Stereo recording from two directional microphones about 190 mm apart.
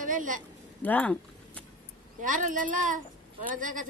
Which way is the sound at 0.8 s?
5° left (ahead or behind).